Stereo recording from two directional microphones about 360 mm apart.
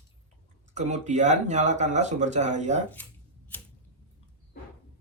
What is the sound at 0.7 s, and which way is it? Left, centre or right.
Speech, centre.